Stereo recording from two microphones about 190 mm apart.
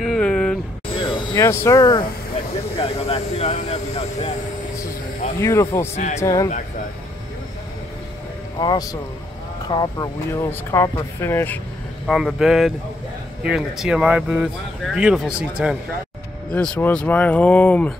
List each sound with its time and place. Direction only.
0.0 s a sound: centre (ahead or behind)
1.0 s speech: 20° left (ahead or behind)
2.8 s speech: 30° left (ahead or behind)
5.4 s speech: 15° left (ahead or behind)
8.5 s speech: 20° left (ahead or behind)
12.1 s speech: centre (ahead or behind)
16.5 s speech: 5° left (ahead or behind)